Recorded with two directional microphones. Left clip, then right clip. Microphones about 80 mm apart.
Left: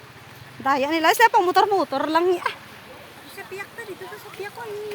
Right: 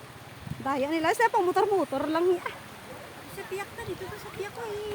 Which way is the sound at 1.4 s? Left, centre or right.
Left.